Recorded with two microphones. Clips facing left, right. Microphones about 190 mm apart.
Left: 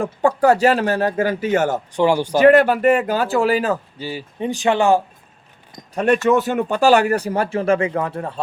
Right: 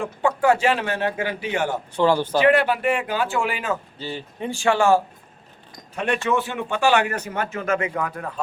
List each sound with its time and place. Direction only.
0.0 s speech: 35° left (ahead or behind)
2.0 s speech: 10° left (ahead or behind)
2.4 s speech: 45° left (ahead or behind)
3.9 s speech: 10° left (ahead or behind)
5.9 s speech: 40° left (ahead or behind)